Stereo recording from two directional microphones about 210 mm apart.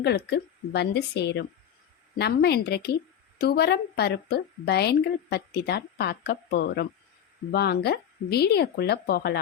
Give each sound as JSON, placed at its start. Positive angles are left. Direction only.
{"t": 0.0, "sound": "a woman's voice", "side_deg": 50}